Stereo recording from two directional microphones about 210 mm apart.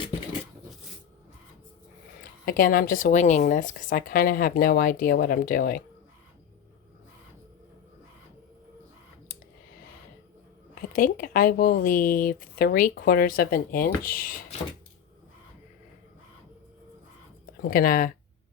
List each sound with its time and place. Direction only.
2.4 s a woman's voice: 40° left (ahead or behind)
10.9 s speech: 40° left (ahead or behind)
17.6 s speech: 45° left (ahead or behind)